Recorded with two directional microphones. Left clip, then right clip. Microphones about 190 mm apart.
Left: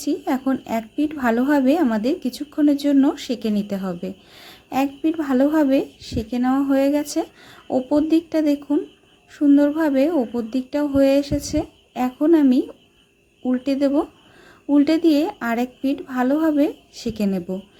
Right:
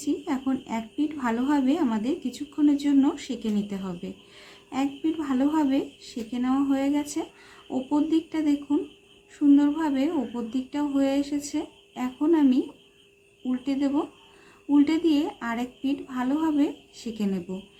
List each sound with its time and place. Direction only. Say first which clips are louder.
0.0 s a woman's voice: left 6 dB; 40° left (ahead or behind)